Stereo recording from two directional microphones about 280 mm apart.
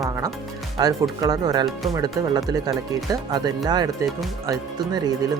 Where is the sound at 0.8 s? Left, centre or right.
Centre.